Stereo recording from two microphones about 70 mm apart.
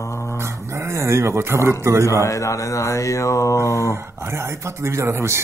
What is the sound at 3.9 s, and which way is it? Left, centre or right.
Speech, right.